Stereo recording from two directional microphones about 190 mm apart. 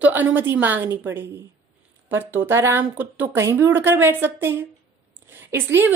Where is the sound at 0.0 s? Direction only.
10° right (ahead or behind).